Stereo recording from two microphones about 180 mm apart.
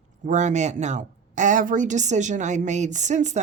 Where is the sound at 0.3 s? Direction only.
40° right (ahead or behind).